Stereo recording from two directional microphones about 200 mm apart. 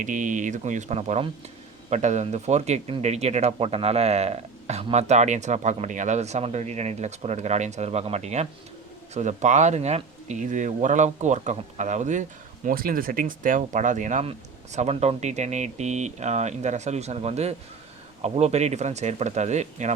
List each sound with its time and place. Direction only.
0.0 s speech: 40° right (ahead or behind)